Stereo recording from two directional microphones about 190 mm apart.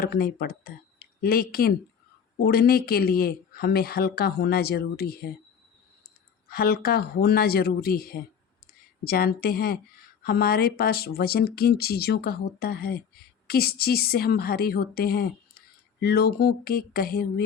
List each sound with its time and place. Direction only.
0.0 s a woman's voice: 50° left (ahead or behind)
6.5 s a woman's voice: 55° left (ahead or behind)